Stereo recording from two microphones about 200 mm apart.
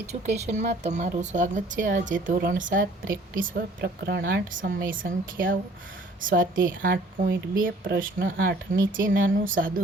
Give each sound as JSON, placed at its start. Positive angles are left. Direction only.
{"t": 0.1, "sound": "speech", "side_deg": -35}
{"t": 3.8, "sound": "speech", "side_deg": -55}